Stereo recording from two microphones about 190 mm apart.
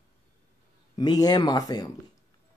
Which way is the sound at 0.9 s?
20° left (ahead or behind).